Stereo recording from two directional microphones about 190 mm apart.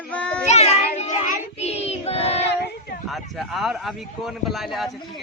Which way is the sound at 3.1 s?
Centre (ahead or behind).